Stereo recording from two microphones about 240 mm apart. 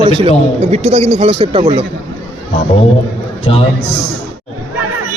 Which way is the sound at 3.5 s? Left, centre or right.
Left.